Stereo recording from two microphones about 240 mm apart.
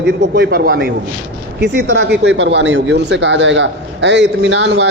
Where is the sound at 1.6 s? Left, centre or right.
Right.